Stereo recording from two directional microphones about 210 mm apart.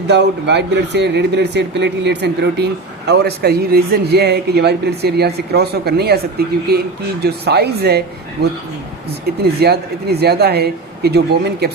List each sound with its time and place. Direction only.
0.1 s speech: 55° right (ahead or behind)